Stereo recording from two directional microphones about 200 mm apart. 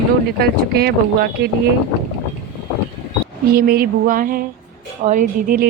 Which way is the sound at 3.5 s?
50° right (ahead or behind).